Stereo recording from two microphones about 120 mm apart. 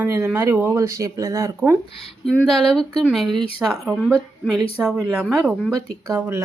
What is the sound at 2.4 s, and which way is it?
Speech, centre (ahead or behind).